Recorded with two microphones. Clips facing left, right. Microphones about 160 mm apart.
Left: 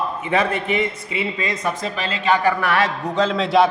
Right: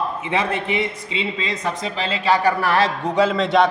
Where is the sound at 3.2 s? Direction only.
5° right (ahead or behind).